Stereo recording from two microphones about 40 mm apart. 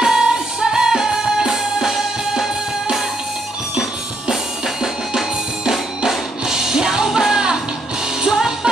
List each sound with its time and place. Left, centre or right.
0.0 s music: centre
5.7 s music: centre